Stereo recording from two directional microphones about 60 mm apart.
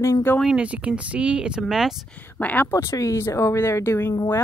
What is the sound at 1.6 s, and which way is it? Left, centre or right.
Speech, centre.